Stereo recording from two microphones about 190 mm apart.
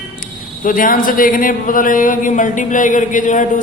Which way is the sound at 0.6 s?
45° left (ahead or behind).